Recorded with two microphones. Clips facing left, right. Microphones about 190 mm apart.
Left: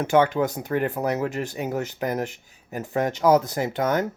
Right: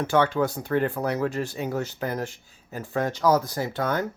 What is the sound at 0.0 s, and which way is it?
Speech, 20° left (ahead or behind).